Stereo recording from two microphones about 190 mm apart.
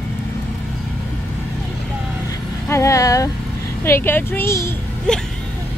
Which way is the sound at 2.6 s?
15° left (ahead or behind).